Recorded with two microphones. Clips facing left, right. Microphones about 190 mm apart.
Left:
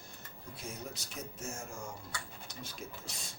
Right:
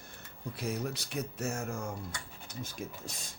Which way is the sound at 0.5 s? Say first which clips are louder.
Right 9 dB; 65° right (ahead or behind).